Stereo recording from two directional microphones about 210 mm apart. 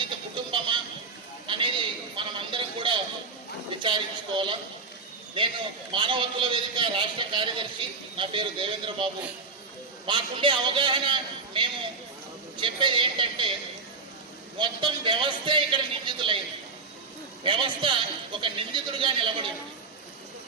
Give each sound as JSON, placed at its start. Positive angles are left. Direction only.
{"t": 0.0, "sound": "a sound", "side_deg": -25}
{"t": 3.7, "sound": "a woman's voice", "side_deg": -25}
{"t": 5.9, "sound": "a man's voice", "side_deg": -25}
{"t": 10.1, "sound": "a man's voice", "side_deg": -25}
{"t": 14.6, "sound": "a man's voice", "side_deg": -20}
{"t": 17.4, "sound": "a man's voice", "side_deg": -25}